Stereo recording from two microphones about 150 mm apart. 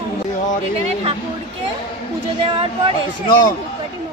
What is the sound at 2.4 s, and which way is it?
Speech, 40° right (ahead or behind).